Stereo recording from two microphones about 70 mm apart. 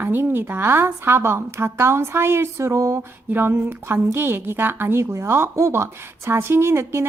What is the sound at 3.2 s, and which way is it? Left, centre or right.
A woman's voice, right.